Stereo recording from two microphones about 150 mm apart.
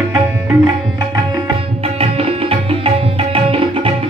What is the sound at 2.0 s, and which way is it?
Tabla, 40° right (ahead or behind).